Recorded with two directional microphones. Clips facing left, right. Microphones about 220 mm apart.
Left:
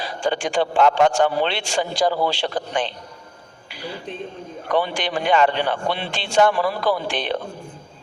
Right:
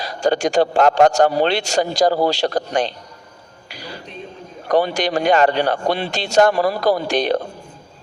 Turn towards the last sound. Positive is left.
turn(degrees=-40)  # may be behind; listen again after turning